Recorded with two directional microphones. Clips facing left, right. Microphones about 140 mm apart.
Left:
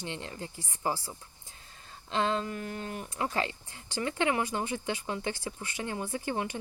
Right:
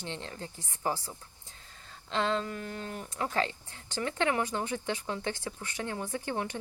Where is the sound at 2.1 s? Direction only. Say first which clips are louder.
Left 1 dB; 15° left (ahead or behind).